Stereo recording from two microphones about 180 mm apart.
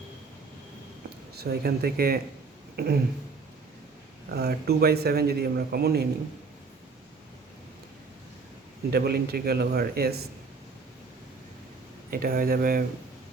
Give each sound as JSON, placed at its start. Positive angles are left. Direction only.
{"t": 1.4, "sound": "a man's voice", "side_deg": -60}
{"t": 4.4, "sound": "a man's voice", "side_deg": -60}
{"t": 8.9, "sound": "a man's voice", "side_deg": -60}
{"t": 12.1, "sound": "speech", "side_deg": -55}